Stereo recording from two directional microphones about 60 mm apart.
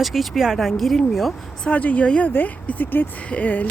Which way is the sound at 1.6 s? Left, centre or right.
Left.